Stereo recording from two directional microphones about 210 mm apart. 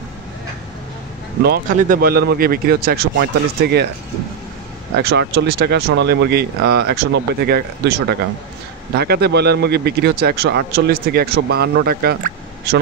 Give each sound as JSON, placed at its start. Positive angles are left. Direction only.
{"t": 1.4, "sound": "speech", "side_deg": -45}
{"t": 4.9, "sound": "speech", "side_deg": -55}